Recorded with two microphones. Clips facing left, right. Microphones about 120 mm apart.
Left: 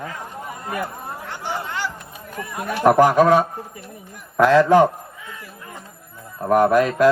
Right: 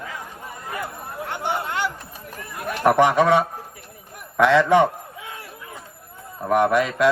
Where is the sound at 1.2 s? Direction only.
60° right (ahead or behind).